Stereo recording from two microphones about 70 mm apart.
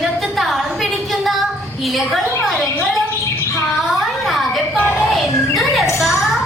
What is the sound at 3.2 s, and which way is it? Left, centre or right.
Bird, left.